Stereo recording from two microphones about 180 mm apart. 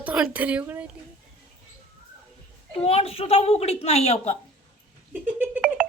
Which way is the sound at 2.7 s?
35° left (ahead or behind).